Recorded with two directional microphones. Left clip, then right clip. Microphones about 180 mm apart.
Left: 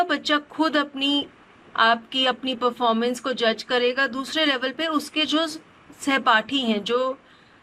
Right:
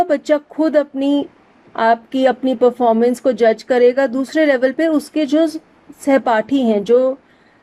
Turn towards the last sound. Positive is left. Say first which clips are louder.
# right 10 dB
turn(degrees=-40)  # may be behind; listen again after turning